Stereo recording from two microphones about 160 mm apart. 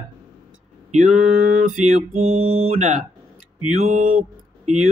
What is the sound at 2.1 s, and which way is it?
Speech, 40° right (ahead or behind).